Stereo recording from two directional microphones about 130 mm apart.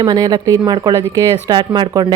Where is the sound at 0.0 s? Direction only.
30° right (ahead or behind).